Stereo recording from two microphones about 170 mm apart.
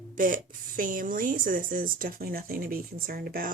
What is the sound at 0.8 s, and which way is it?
Speech, 50° right (ahead or behind).